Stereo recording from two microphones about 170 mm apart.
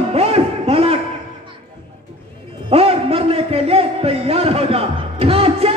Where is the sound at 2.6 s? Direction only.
35° right (ahead or behind).